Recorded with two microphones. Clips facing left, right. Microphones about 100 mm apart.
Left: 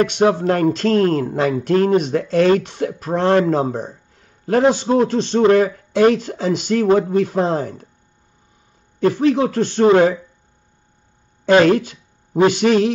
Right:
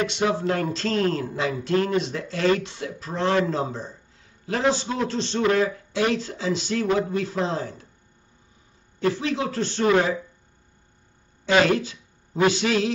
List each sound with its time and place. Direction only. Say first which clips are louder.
0.0 s speech: left 8 dB; 60° left (ahead or behind)
9.0 s speech: left 9 dB; 50° left (ahead or behind)
11.4 s speech: left 7 dB; 45° left (ahead or behind)